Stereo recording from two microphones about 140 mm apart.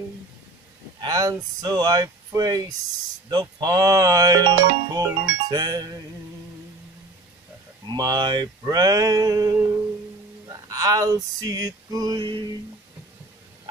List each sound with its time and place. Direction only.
1.0 s speech: 25° right (ahead or behind)
7.8 s speech: 30° right (ahead or behind)
10.5 s male singing: 25° right (ahead or behind)